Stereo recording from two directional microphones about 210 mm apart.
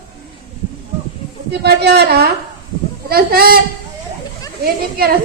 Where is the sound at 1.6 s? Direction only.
50° right (ahead or behind).